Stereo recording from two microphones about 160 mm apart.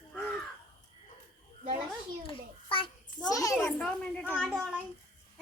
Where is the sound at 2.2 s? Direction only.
35° left (ahead or behind).